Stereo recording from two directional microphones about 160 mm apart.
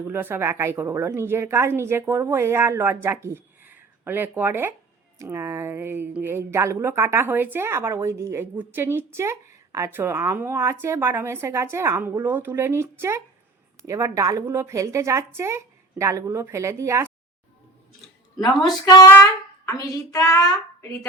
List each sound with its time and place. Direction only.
0.0 s a woman's voice: 15° right (ahead or behind)
18.6 s speech: 20° left (ahead or behind)